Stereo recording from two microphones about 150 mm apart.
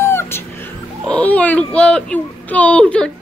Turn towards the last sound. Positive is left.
turn(degrees=5)  # may be behind; listen again after turning